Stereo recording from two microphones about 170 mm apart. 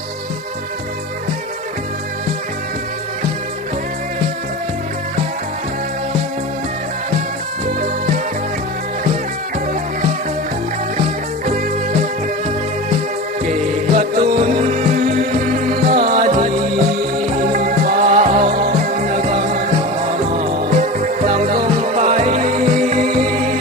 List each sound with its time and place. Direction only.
13.9 s music: 50° right (ahead or behind)